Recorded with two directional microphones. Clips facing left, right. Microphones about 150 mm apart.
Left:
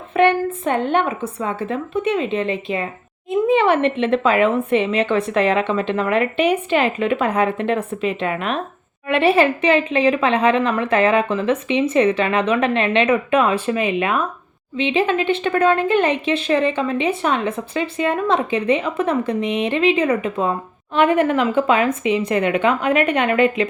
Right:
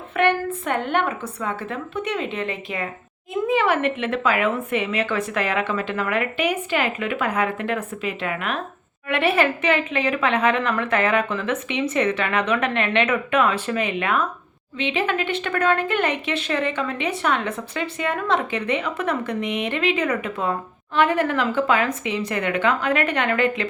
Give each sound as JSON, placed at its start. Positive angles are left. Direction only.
{"t": 0.1, "sound": "a woman's voice", "side_deg": 20}